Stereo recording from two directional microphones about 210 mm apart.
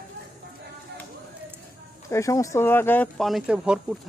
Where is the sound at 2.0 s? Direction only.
15° left (ahead or behind); by 3.9 s centre (ahead or behind).